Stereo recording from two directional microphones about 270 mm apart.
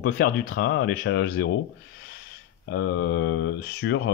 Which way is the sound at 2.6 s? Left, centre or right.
Left.